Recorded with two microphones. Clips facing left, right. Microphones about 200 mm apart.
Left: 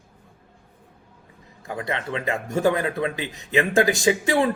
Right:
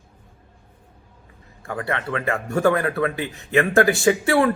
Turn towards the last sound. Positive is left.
turn(degrees=15)  # may be behind; listen again after turning